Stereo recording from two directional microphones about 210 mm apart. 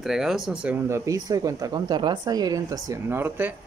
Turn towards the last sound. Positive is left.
turn(degrees=-10)  # may be behind; listen again after turning